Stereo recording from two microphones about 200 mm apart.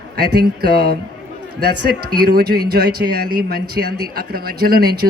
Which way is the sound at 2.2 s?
50° right (ahead or behind).